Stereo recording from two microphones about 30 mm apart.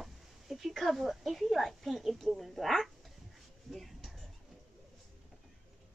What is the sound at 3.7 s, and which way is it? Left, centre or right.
Speech, centre.